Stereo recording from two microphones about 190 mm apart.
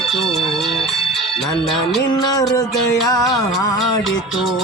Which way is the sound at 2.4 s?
20° left (ahead or behind).